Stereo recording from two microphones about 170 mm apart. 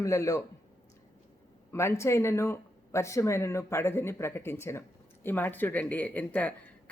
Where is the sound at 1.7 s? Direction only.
15° left (ahead or behind).